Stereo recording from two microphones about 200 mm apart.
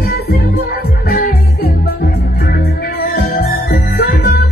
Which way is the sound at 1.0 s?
45° left (ahead or behind).